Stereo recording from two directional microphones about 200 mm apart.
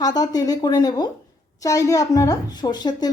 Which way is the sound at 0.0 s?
20° left (ahead or behind).